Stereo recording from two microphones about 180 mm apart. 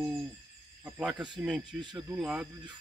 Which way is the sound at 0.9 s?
5° right (ahead or behind).